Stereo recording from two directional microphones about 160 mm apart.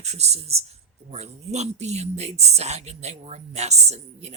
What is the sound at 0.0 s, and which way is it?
Speech, 45° right (ahead or behind).